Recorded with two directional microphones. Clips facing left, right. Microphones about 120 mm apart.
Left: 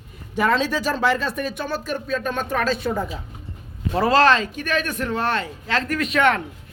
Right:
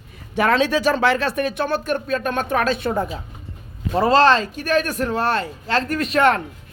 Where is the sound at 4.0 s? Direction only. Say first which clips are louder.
Right 2 dB; 25° right (ahead or behind).